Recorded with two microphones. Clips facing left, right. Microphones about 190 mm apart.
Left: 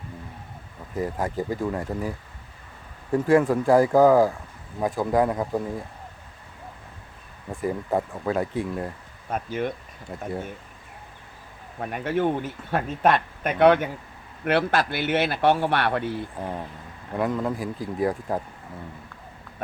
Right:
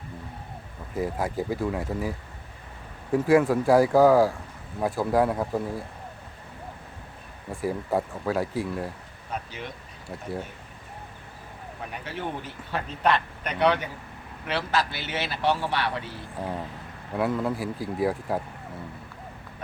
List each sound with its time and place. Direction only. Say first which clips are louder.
0.9 s speech: left 1 dB; 10° right (ahead or behind)
7.5 s speech: left 1 dB; 5° right (ahead or behind)
9.3 s speech: left 8 dB; 50° left (ahead or behind)
11.8 s speech: left 10 dB; 50° left (ahead or behind)
17.2 s speech: left 1 dB; 5° right (ahead or behind)